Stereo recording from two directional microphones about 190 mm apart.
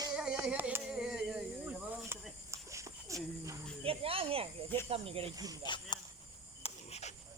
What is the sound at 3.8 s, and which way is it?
Speech, 30° right (ahead or behind).